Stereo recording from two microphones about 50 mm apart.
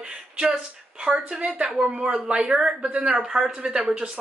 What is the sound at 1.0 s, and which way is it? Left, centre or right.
Speech, right.